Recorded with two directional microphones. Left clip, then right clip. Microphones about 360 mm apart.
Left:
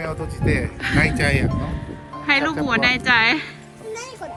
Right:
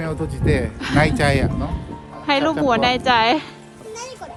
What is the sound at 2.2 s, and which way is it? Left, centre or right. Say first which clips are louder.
A woman's voice: right 2 dB; centre.